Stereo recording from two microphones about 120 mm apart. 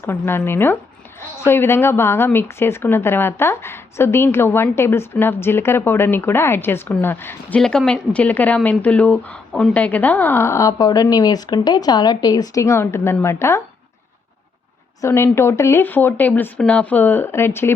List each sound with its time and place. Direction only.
0.0 s speech: 20° left (ahead or behind)
7.6 s speech: 5° left (ahead or behind); by 13.6 s 20° left (ahead or behind)
15.0 s speech: 20° left (ahead or behind)